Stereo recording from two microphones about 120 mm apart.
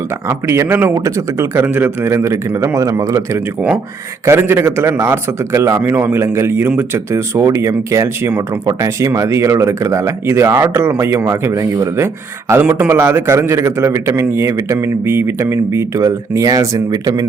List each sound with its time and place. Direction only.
0.3 s speech: 20° right (ahead or behind)